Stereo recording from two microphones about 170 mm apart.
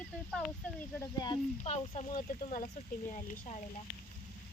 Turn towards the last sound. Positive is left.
turn(degrees=45)  # may be behind; listen again after turning